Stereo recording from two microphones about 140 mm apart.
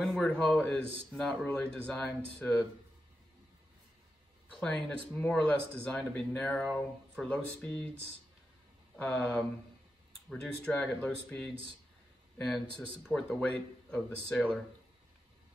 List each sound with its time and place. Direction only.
0.0 s speech: 5° left (ahead or behind)
4.6 s speech: 5° left (ahead or behind)
8.9 s speech: 5° left (ahead or behind)